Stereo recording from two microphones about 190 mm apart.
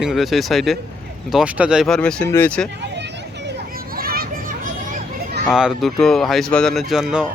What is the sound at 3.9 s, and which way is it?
Children playing, 50° right (ahead or behind).